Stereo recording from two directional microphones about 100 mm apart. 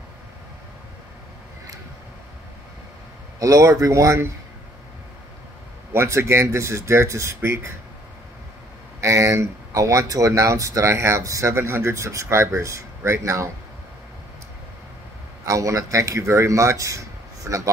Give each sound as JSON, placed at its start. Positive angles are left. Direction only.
{"t": 3.3, "sound": "speech", "side_deg": -35}
{"t": 5.9, "sound": "speech", "side_deg": -25}
{"t": 9.0, "sound": "speech", "side_deg": -30}
{"t": 15.4, "sound": "speech", "side_deg": -35}